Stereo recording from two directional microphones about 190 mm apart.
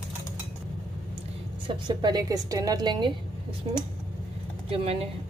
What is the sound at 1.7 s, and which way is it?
A woman's voice, 25° right (ahead or behind).